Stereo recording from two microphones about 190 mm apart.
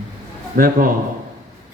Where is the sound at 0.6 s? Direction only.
50° right (ahead or behind).